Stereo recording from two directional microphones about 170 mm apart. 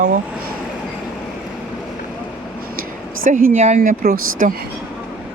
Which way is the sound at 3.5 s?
40° right (ahead or behind).